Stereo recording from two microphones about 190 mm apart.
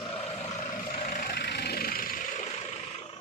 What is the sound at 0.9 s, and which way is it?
Vehicle, 45° left (ahead or behind).